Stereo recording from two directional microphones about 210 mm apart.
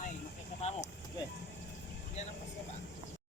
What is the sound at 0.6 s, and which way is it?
Vehicle, 35° left (ahead or behind).